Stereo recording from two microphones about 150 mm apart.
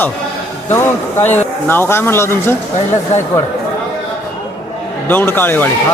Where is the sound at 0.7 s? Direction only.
15° left (ahead or behind).